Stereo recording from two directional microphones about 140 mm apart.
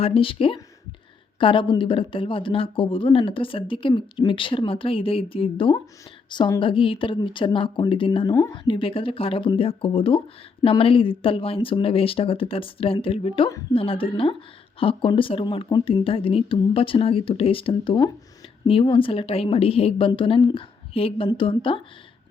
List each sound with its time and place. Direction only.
0.0 s speech: 40° left (ahead or behind)